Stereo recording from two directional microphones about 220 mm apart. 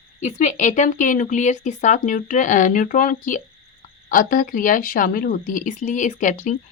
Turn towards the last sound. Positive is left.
turn(degrees=35)  # may be behind; listen again after turning